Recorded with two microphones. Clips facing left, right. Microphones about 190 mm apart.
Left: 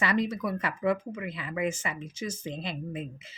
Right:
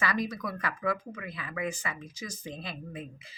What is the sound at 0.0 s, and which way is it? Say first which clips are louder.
Speech: left 4 dB; 25° left (ahead or behind).